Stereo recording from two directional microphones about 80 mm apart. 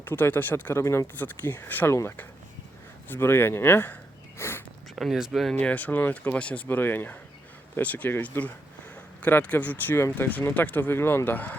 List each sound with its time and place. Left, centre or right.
0.0 s speech: left
1.2 s speech: left
1.9 s speech: left
4.4 s a sound: left
4.9 s speech: centre
5.5 s speech: centre